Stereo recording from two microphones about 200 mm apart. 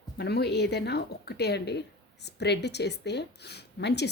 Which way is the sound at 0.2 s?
55° left (ahead or behind).